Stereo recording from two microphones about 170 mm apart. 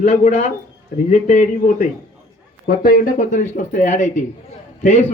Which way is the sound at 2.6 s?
55° left (ahead or behind).